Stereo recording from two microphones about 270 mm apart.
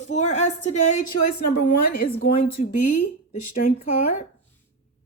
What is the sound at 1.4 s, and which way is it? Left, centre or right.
Speech, left.